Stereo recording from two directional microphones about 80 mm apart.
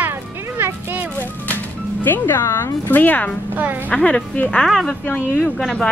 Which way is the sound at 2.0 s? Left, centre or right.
Left.